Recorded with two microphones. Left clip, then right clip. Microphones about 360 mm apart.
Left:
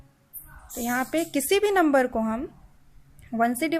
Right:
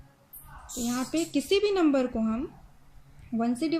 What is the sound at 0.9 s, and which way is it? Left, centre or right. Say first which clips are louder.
Speech: left 5 dB; centre.